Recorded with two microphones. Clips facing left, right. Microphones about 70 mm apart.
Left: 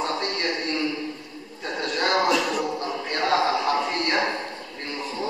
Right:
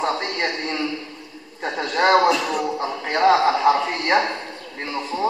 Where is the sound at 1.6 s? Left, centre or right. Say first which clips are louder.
Right 6 dB; right.